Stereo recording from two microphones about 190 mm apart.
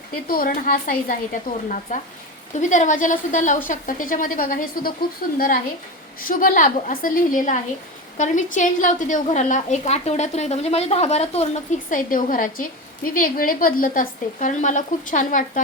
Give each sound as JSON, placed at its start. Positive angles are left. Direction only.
{"t": 0.3, "sound": "speech", "side_deg": 50}
{"t": 6.2, "sound": "a woman's voice", "side_deg": 45}